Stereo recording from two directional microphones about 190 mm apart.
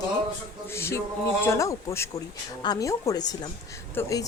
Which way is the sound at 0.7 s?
15° left (ahead or behind).